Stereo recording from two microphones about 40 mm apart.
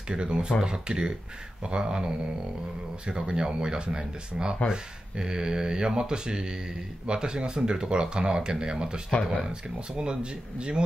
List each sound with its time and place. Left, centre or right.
0.1 s speech: right
3.1 s speech: right